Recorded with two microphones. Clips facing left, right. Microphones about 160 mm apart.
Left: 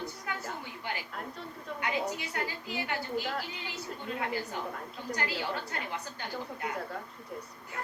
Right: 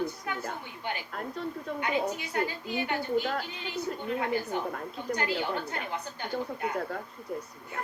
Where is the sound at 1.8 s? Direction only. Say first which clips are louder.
Right 3 dB; 25° right (ahead or behind).